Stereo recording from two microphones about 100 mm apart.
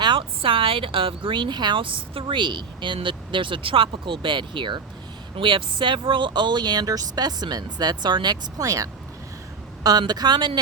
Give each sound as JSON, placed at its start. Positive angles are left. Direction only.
{"t": 0.0, "sound": "a woman's voice", "side_deg": -60}